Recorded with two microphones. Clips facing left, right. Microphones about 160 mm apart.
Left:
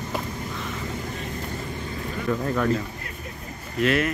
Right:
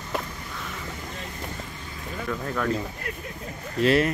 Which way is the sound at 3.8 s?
30° right (ahead or behind).